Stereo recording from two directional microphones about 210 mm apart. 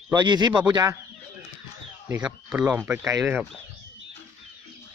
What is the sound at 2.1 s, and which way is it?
Speech, 5° right (ahead or behind).